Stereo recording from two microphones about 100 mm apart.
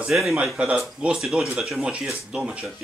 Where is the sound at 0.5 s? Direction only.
10° right (ahead or behind).